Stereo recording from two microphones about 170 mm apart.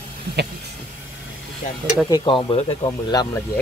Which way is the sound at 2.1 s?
30° left (ahead or behind).